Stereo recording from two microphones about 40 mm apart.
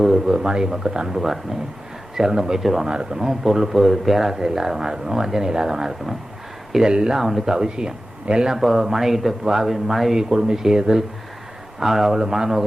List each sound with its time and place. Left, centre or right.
0.0 s a sound: centre
0.3 s speech: centre
2.8 s speech: centre
7.2 s speech: centre
8.5 s speech: centre
10.2 s speech: centre